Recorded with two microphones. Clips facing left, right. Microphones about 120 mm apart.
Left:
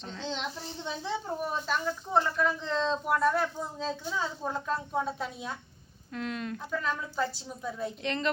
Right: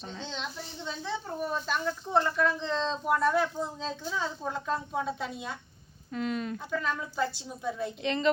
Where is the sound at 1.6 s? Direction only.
5° left (ahead or behind).